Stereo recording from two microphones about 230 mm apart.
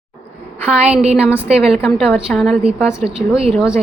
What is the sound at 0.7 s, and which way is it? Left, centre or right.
Speech, right.